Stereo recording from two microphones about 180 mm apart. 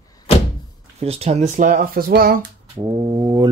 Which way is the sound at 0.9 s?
35° right (ahead or behind).